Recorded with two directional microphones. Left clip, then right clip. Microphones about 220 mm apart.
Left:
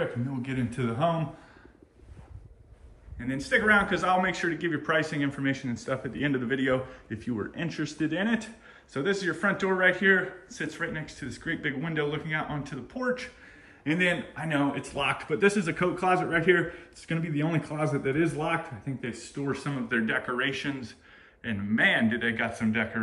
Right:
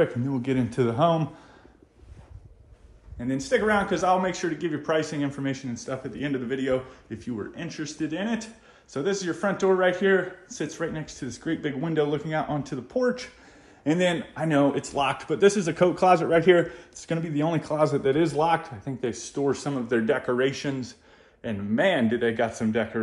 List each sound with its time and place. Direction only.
0.4 s speech: 25° right (ahead or behind)
3.2 s a man's voice: 20° right (ahead or behind)
15.0 s a man's voice: 15° right (ahead or behind)
19.3 s speech: 15° right (ahead or behind)